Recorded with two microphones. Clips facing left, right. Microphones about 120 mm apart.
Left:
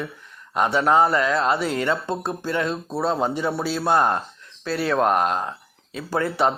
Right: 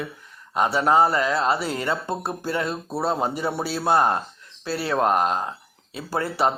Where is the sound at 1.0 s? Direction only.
30° right (ahead or behind).